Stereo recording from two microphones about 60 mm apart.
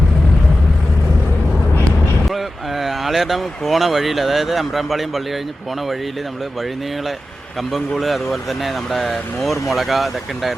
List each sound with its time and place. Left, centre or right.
2.3 s speech: centre
7.7 s speech: centre